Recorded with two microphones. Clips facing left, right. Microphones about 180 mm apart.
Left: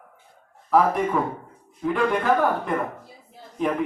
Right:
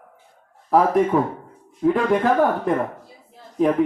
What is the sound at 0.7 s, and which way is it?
A man's voice, 35° right (ahead or behind).